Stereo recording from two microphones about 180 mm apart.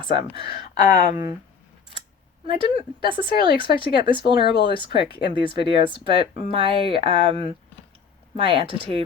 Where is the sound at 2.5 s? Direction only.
30° right (ahead or behind).